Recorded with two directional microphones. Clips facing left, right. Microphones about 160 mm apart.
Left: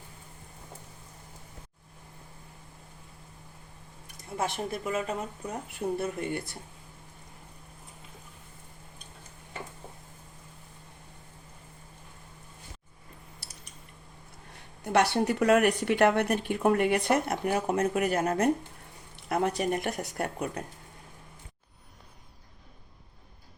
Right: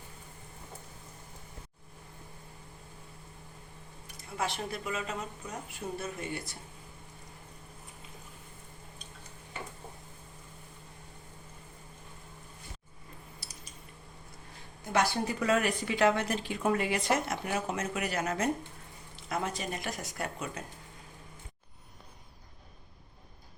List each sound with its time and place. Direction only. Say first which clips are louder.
4.4 s a woman's voice: left 3 dB; 50° left (ahead or behind)
14.5 s a woman's voice: left 5 dB; 70° left (ahead or behind)